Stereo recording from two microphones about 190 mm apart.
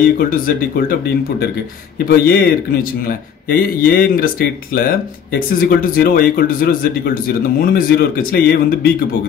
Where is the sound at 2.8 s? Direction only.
50° left (ahead or behind).